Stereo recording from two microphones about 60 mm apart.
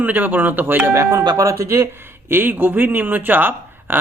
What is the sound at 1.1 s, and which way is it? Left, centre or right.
Speech, right.